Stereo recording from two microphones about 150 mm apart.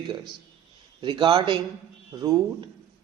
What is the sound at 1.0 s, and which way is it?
Speech, 30° right (ahead or behind).